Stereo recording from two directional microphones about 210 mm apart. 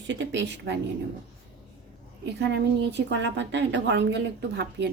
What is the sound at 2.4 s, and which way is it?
A woman's voice, 55° right (ahead or behind).